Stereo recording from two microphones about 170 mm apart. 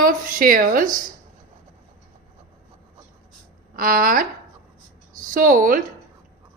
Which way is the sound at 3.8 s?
55° right (ahead or behind).